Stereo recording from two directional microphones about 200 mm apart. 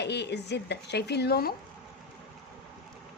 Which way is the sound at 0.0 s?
60° left (ahead or behind).